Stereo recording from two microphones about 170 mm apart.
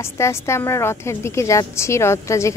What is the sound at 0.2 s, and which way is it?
A woman's voice, 15° left (ahead or behind).